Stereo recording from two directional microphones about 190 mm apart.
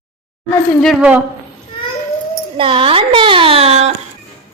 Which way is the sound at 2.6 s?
30° right (ahead or behind).